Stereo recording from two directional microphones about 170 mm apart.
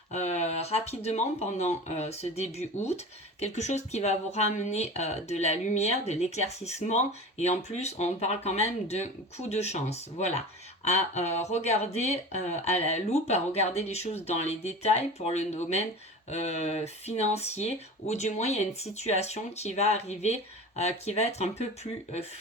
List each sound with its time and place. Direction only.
0.1 s speech: 40° left (ahead or behind)